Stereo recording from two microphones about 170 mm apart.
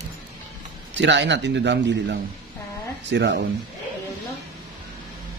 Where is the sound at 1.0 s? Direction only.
90° right.